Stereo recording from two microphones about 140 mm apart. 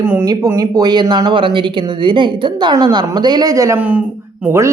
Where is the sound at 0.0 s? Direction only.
15° right (ahead or behind).